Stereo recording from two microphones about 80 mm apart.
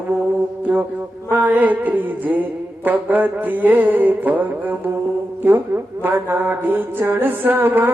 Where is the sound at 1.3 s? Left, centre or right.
Right.